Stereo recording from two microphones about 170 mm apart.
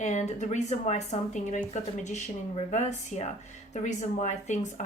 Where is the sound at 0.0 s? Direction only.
40° left (ahead or behind).